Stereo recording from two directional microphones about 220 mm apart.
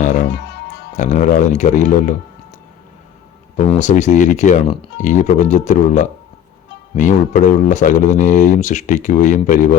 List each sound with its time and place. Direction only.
0.0 s music: 35° left (ahead or behind)
0.3 s music: 50° left (ahead or behind)
0.9 s a man's voice: 35° left (ahead or behind)
3.8 s a man's voice: 35° left (ahead or behind)
4.7 s a man's voice: 25° left (ahead or behind)